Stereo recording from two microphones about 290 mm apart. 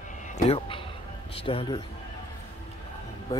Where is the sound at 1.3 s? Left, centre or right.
Centre.